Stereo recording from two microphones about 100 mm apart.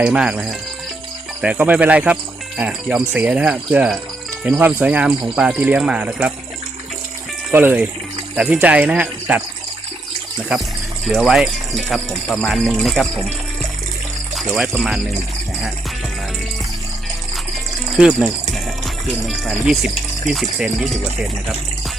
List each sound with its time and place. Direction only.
0.0 s speech: 10° right (ahead or behind)
7.5 s speech: 20° right (ahead or behind)
11.0 s speech: centre (ahead or behind)
14.3 s speech: 5° right (ahead or behind)
17.9 s speech: 10° right (ahead or behind)